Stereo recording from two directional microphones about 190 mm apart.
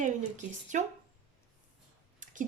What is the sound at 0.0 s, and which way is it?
Speech, 40° right (ahead or behind).